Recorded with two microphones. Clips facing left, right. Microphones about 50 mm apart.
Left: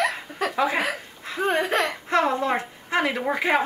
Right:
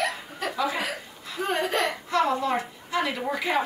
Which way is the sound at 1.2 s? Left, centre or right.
Left.